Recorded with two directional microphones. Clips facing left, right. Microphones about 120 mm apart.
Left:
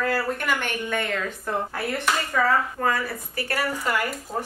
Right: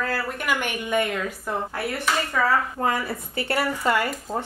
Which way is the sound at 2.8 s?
20° right (ahead or behind).